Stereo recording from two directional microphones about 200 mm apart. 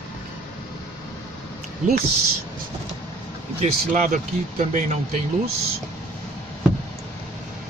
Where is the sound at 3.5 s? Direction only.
40° right (ahead or behind).